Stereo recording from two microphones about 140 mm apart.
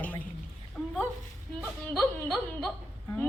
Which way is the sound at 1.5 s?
10° left (ahead or behind).